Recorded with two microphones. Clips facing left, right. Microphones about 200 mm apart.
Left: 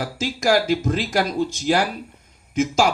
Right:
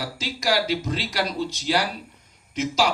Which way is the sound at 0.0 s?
50° left (ahead or behind).